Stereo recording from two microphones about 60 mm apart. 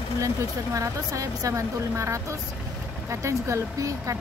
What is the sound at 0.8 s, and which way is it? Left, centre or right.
Speech, right.